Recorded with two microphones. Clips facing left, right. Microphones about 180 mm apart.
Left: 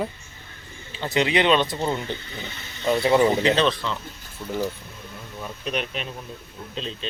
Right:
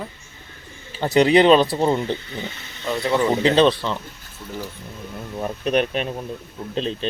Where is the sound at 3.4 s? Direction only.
35° right (ahead or behind).